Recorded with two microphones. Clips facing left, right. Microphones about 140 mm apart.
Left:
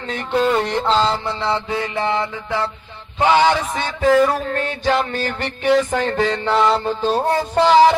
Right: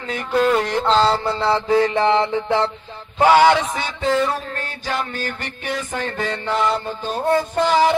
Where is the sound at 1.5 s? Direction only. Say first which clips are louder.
Right 6 dB; 35° right (ahead or behind).